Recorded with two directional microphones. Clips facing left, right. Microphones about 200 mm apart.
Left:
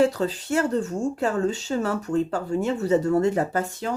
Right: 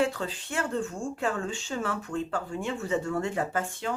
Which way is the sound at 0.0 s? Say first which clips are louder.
Left 7 dB; 40° left (ahead or behind).